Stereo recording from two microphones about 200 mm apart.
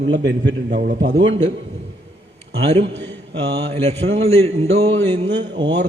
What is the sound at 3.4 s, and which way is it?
Speech, 60° right (ahead or behind).